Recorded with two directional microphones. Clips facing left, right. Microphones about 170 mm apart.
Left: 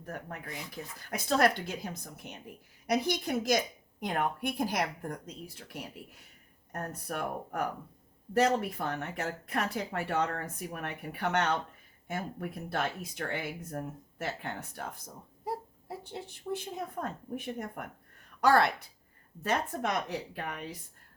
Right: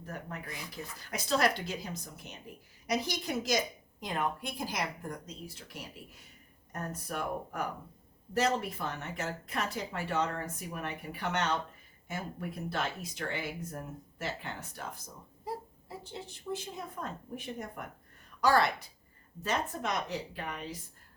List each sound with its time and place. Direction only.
0.0 s a woman's voice: 55° left (ahead or behind)